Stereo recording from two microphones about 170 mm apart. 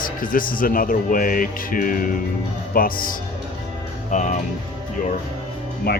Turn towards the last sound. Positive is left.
turn(degrees=65)  # may be behind; listen again after turning